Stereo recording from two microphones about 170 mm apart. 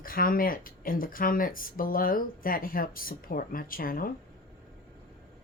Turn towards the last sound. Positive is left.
turn(degrees=55)  # may be behind; listen again after turning